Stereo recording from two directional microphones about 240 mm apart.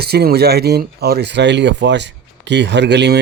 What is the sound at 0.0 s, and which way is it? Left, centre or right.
Speech, right.